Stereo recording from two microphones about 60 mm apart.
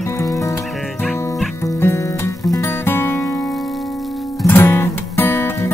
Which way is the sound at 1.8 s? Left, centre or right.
Left.